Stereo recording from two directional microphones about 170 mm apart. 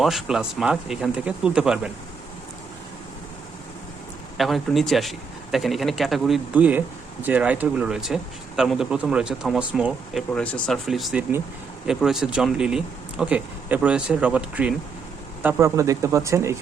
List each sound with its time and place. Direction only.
0.0 s speech: centre (ahead or behind)
4.4 s speech: centre (ahead or behind); by 16.6 s 15° right (ahead or behind)